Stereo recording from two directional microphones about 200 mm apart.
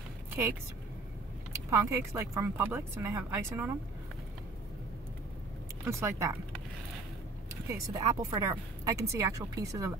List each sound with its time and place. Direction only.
1.7 s speech: 15° right (ahead or behind)
5.9 s speech: 15° right (ahead or behind)
7.7 s speech: 15° right (ahead or behind)